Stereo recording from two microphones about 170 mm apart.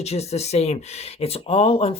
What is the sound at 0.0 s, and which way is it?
Speech, 40° left (ahead or behind).